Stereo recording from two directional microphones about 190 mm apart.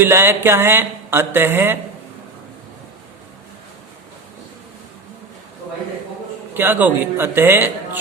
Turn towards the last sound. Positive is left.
turn(degrees=-10)  # may be behind; listen again after turning